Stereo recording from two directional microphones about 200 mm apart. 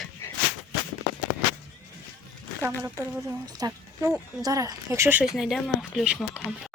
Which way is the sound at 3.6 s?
15° right (ahead or behind).